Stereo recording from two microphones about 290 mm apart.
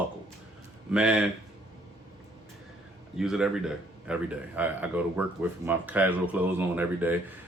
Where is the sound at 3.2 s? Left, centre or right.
Centre.